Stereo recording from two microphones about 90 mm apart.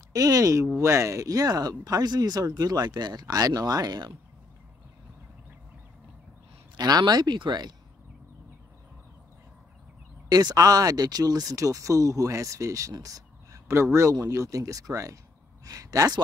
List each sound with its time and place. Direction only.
0.1 s speech: 40° right (ahead or behind)
6.8 s speech: 45° right (ahead or behind)
10.3 s speech: 45° right (ahead or behind)
12.9 s a sound: 40° right (ahead or behind)
14.2 s speech: 35° right (ahead or behind)